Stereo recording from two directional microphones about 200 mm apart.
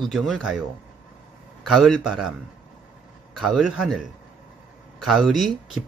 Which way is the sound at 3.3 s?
Centre (ahead or behind).